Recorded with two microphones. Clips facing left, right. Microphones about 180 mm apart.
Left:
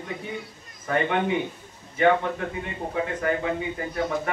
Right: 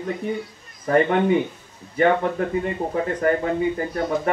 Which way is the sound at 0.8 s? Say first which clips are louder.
Right 6 dB; 40° right (ahead or behind).